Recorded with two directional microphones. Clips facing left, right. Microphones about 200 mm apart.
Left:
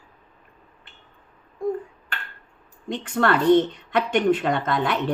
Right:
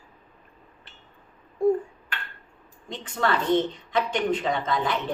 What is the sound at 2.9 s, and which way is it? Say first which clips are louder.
Speech: left 4 dB; 65° left (ahead or behind).